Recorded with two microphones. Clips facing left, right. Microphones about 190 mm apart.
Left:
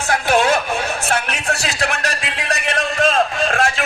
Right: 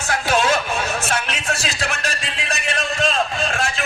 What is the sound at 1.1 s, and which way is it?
Music, 60° left (ahead or behind).